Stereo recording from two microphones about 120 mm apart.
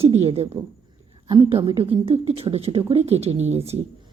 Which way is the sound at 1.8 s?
50° right (ahead or behind).